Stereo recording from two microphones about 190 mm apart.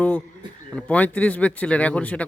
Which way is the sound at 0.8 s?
5° left (ahead or behind).